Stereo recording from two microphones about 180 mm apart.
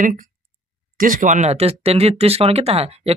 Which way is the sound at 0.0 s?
45° right (ahead or behind).